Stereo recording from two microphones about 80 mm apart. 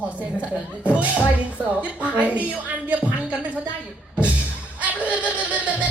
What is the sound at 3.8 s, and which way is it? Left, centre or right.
Music, centre.